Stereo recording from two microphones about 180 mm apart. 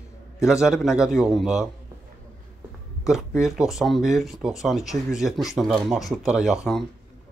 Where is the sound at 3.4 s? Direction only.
Centre (ahead or behind).